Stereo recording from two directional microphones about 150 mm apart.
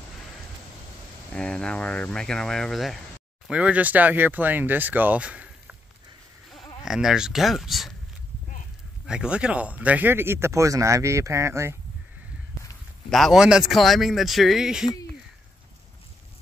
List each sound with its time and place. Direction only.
1.3 s speech: 5° left (ahead or behind); by 5.8 s 10° right (ahead or behind)
6.8 s speech: 5° right (ahead or behind)
9.0 s speech: 5° right (ahead or behind)
13.1 s speech: centre (ahead or behind)